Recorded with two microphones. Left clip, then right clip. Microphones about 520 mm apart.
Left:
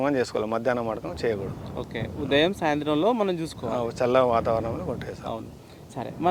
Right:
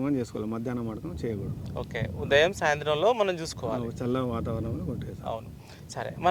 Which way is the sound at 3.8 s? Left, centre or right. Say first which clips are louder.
Left 10 dB; left.